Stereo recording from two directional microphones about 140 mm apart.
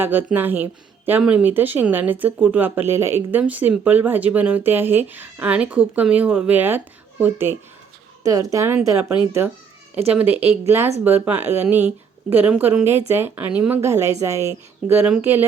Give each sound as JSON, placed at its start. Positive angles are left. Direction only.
{"t": 0.0, "sound": "speech", "side_deg": -15}
{"t": 8.2, "sound": "a woman's voice", "side_deg": -25}
{"t": 10.1, "sound": "speech", "side_deg": -10}